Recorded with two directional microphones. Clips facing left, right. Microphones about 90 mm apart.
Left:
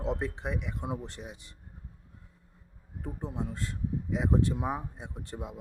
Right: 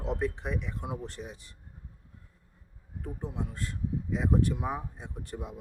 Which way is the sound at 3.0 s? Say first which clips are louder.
Left 1 dB; 25° left (ahead or behind).